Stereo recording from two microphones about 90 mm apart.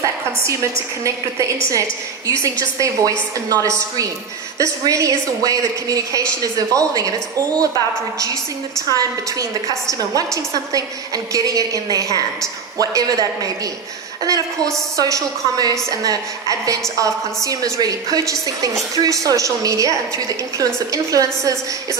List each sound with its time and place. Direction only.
0.0 s a woman's voice: 35° right (ahead or behind)
8.9 s a woman's voice: 40° right (ahead or behind)